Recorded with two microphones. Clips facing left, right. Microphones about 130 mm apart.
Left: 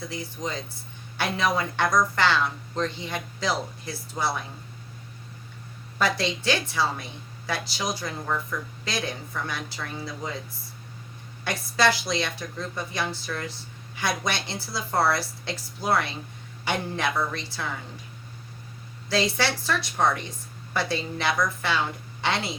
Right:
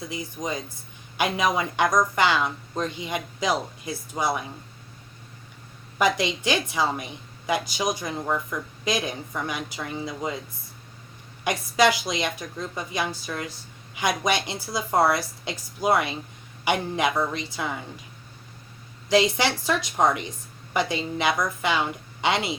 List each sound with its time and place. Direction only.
0.1 s a woman's voice: 15° right (ahead or behind)
6.0 s a woman's voice: 15° right (ahead or behind)
11.4 s a woman's voice: 15° right (ahead or behind)
19.0 s a woman's voice: 15° right (ahead or behind)